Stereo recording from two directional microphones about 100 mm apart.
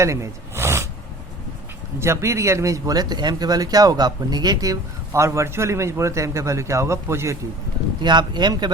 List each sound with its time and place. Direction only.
0.0 s gasp: 30° right (ahead or behind)
2.0 s speech: 30° right (ahead or behind)
8.0 s speech: 50° right (ahead or behind)